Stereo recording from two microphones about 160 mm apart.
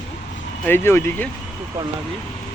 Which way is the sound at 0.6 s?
15° left (ahead or behind).